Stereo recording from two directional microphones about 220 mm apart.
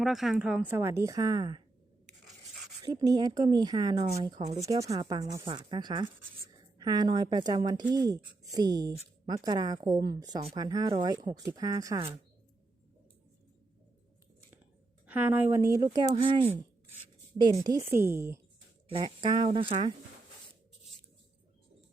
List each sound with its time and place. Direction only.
0.0 s speech: centre (ahead or behind); by 1.6 s 20° right (ahead or behind)
2.8 s speech: 15° right (ahead or behind)
15.0 s speech: 10° right (ahead or behind)
18.9 s speech: 20° right (ahead or behind)